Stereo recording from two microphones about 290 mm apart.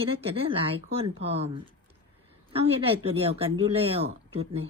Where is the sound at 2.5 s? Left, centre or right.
Centre.